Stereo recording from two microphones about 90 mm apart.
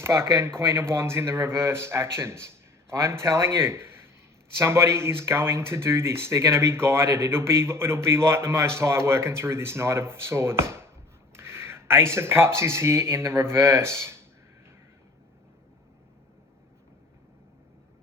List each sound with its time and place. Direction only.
0.1 s speech: 30° right (ahead or behind)
3.6 s a sound: 25° right (ahead or behind)
4.6 s speech: 30° right (ahead or behind)